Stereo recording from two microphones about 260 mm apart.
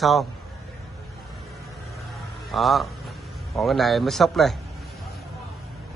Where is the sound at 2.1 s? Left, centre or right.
Centre.